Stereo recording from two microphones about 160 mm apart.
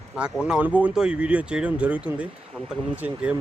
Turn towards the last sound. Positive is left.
turn(degrees=-10)  # may be behind; listen again after turning